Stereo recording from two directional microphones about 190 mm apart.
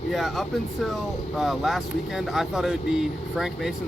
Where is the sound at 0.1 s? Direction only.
Centre (ahead or behind).